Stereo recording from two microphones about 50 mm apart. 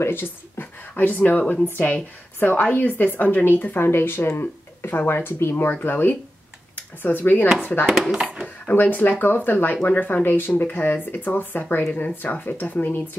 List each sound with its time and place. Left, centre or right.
0.0 s a woman's voice: left
3.8 s a woman's voice: left
7.8 s speech: centre
8.6 s a woman's voice: left